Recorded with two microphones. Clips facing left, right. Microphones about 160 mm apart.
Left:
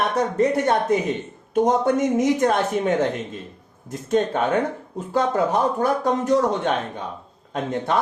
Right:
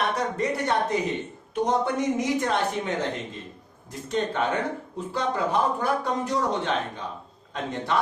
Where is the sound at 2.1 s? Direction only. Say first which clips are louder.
Left 6 dB; 50° left (ahead or behind).